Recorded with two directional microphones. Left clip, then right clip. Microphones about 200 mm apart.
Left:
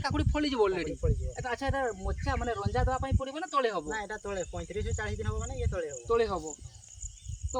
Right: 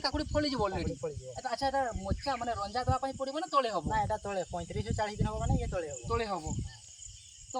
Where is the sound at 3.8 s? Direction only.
10° right (ahead or behind).